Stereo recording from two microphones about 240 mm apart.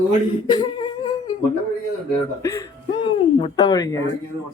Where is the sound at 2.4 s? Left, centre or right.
Centre.